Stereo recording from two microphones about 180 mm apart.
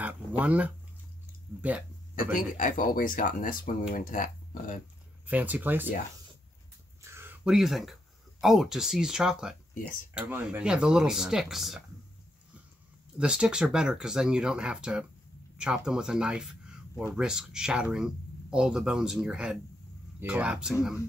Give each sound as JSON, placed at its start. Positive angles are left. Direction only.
{"t": 0.0, "sound": "a sound", "side_deg": -10}
{"t": 1.6, "sound": "speech", "side_deg": -10}
{"t": 2.3, "sound": "speech", "side_deg": 45}
{"t": 5.2, "sound": "speech", "side_deg": -10}
{"t": 7.0, "sound": "a sound", "side_deg": -15}
{"t": 7.4, "sound": "speech", "side_deg": 0}
{"t": 13.2, "sound": "speech", "side_deg": -5}